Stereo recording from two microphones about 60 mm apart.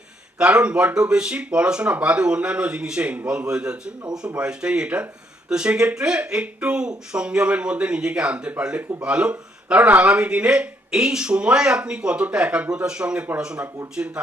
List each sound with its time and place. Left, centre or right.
0.3 s speech: centre